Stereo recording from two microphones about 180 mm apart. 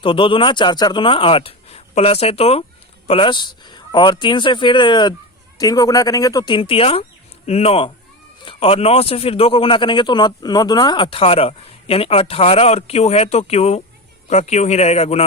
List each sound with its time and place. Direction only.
0.0 s a man's voice: 30° left (ahead or behind)